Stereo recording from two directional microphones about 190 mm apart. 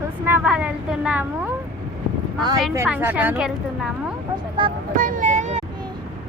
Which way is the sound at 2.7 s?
10° right (ahead or behind).